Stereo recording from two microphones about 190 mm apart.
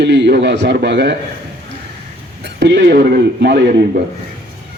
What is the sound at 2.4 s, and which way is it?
Speech, 65° right (ahead or behind).